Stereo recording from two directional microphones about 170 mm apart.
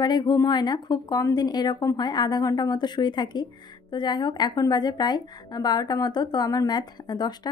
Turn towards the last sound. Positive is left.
turn(degrees=25)  # may be behind; listen again after turning